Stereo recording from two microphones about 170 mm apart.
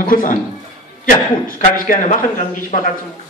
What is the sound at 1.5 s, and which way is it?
Speech, 50° left (ahead or behind).